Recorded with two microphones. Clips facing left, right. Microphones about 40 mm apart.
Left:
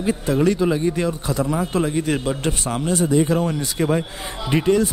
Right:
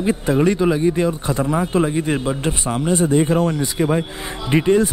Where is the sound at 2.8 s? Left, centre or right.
Right.